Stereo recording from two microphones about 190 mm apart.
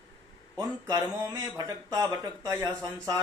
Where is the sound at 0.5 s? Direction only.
20° right (ahead or behind).